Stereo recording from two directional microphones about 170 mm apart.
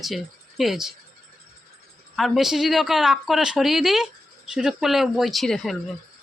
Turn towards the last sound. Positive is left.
turn(degrees=0)  # may be behind; listen again after turning